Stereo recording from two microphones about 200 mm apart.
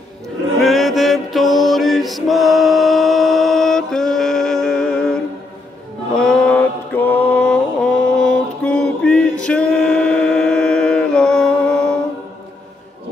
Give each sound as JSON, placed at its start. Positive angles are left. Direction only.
{"t": 0.6, "sound": "mantra", "side_deg": 0}